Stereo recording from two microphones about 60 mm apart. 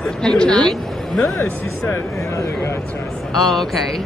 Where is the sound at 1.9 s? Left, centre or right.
Left.